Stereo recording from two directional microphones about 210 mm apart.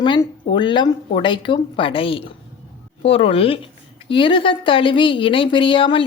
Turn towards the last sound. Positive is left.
turn(degrees=25)  # may be behind; listen again after turning